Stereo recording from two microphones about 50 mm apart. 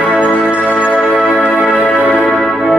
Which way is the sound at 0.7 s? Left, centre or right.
Left.